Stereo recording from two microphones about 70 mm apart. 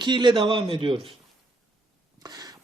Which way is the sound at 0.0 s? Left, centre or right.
Right.